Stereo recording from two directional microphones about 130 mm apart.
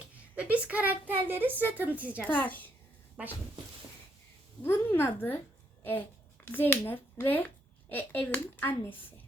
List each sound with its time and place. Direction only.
0.3 s a woman's voice: 10° right (ahead or behind)
2.2 s speech: 15° left (ahead or behind)
4.6 s speech: 15° left (ahead or behind)